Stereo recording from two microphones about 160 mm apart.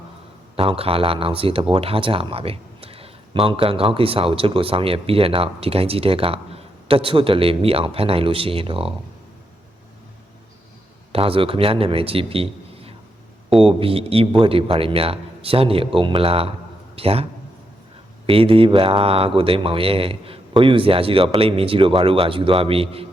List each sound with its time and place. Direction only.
0.5 s speech: 35° right (ahead or behind)
11.1 s a man's voice: 35° right (ahead or behind)
18.3 s speech: 35° right (ahead or behind)